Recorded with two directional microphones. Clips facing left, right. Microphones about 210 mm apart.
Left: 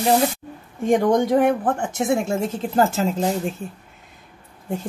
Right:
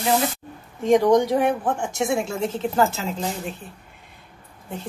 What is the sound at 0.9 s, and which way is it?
A woman's voice, 50° left (ahead or behind).